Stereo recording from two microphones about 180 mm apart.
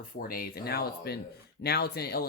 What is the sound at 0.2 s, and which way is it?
Speech, 55° left (ahead or behind).